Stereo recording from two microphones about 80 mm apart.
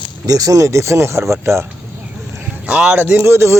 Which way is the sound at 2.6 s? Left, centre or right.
Centre.